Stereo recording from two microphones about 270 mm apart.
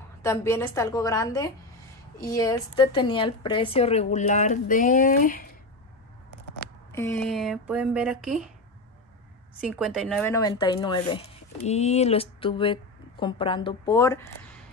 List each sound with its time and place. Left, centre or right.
0.2 s a woman's voice: centre; by 5.5 s left
6.9 s speech: centre
9.6 s speech: centre